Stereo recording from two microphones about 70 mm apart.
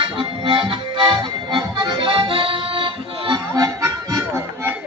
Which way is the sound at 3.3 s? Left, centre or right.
Right.